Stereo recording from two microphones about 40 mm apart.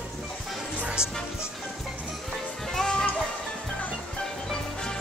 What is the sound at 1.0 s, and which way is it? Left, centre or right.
Music, left.